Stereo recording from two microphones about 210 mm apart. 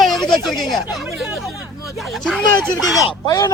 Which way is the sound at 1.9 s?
Centre (ahead or behind).